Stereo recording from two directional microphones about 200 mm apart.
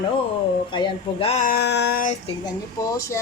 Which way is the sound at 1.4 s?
55° left (ahead or behind).